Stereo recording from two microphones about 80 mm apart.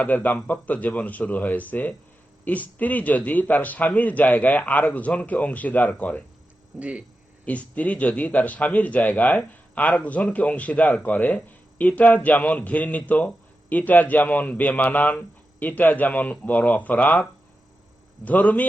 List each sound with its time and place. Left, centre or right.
0.0 s a man's voice: left
6.7 s speech: centre
7.4 s a man's voice: centre
18.3 s a man's voice: left